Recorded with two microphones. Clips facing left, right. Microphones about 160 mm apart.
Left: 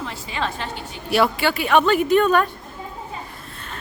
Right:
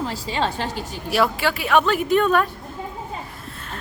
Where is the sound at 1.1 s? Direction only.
Centre (ahead or behind).